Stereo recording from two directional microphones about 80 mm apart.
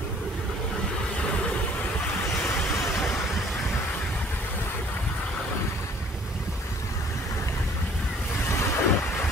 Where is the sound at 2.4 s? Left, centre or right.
Left.